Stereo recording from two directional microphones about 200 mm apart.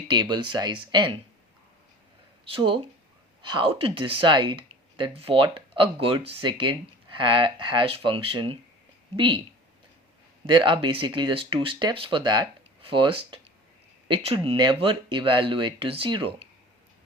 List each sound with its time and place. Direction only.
0.1 s speech: 20° right (ahead or behind)
2.5 s speech: 25° right (ahead or behind)
10.4 s speech: 25° right (ahead or behind)